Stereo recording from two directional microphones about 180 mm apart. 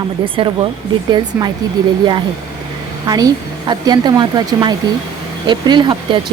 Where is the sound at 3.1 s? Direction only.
20° right (ahead or behind).